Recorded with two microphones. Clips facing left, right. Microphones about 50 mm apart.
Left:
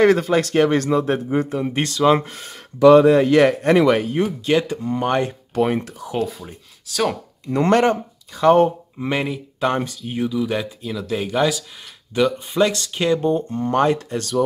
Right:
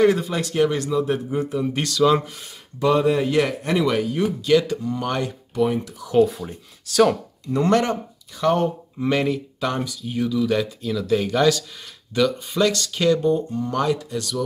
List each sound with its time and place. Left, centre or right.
0.0 s a man's voice: left
2.2 s speech: left
2.8 s a man's voice: left
5.5 s speech: left
6.1 s speech: centre
7.4 s speech: left
8.6 s speech: centre
9.6 s speech: left
13.5 s speech: left